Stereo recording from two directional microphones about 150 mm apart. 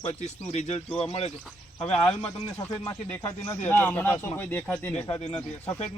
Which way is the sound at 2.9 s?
25° left (ahead or behind).